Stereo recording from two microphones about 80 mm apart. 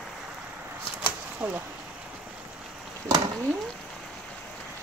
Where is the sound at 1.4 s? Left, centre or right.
Right.